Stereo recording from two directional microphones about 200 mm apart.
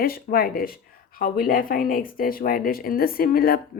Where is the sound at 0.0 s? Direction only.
50° left (ahead or behind).